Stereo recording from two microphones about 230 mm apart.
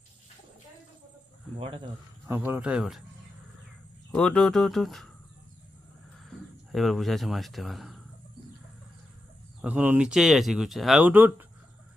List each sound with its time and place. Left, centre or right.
1.5 s speech: right
2.2 s speech: centre
4.1 s speech: centre
6.7 s speech: centre
9.6 s speech: centre